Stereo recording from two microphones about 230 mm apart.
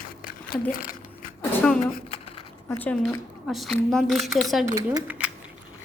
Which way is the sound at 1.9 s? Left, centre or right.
Left.